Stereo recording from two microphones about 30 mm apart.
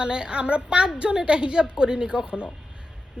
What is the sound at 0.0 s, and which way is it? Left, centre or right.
Speech, right.